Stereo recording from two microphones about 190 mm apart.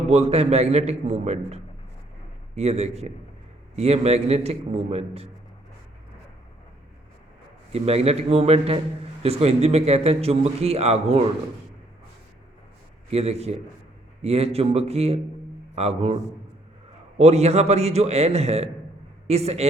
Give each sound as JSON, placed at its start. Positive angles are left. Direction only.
{"t": 0.1, "sound": "a man's voice", "side_deg": -35}
{"t": 7.7, "sound": "a man's voice", "side_deg": -35}
{"t": 13.1, "sound": "a man's voice", "side_deg": -35}
{"t": 17.2, "sound": "a man's voice", "side_deg": -35}